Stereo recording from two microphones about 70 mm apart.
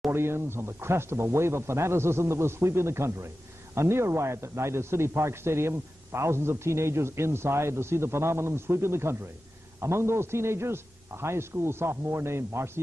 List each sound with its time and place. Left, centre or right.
0.1 s speech: right